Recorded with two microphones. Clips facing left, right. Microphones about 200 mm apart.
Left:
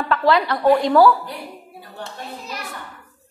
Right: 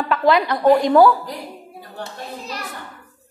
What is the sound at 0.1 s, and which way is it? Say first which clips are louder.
A woman's voice: right 1 dB; 15° right (ahead or behind).